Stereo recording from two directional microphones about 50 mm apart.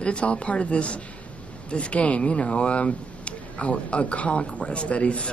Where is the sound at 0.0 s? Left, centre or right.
Left.